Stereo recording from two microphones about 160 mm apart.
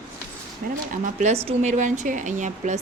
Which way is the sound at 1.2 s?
40° right (ahead or behind).